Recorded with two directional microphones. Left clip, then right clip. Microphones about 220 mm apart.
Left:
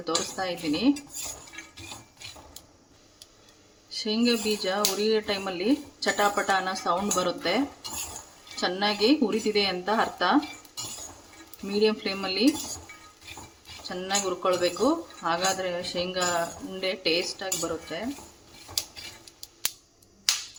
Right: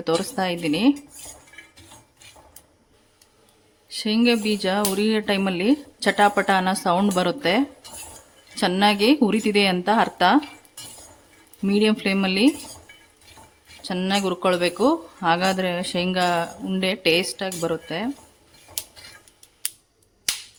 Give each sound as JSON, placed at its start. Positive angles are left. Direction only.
{"t": 0.0, "sound": "speech", "side_deg": -50}
{"t": 3.8, "sound": "speech", "side_deg": -50}
{"t": 8.6, "sound": "speech", "side_deg": -50}
{"t": 11.6, "sound": "speech", "side_deg": -50}
{"t": 13.8, "sound": "speech", "side_deg": -55}